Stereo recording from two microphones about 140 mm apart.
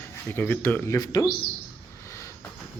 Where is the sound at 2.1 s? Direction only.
20° left (ahead or behind).